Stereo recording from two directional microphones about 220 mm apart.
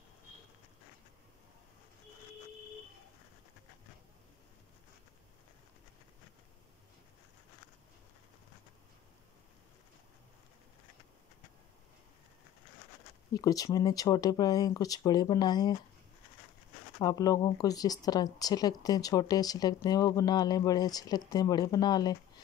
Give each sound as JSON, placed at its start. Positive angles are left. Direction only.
{"t": 13.3, "sound": "speech", "side_deg": 15}
{"t": 17.0, "sound": "speech", "side_deg": 15}